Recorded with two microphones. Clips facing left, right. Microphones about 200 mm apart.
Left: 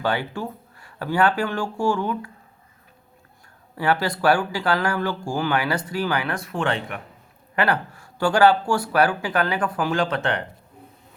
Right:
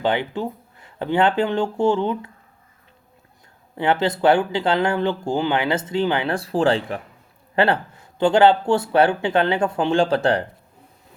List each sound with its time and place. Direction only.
0.0 s speech: 20° right (ahead or behind)
3.8 s speech: 20° right (ahead or behind)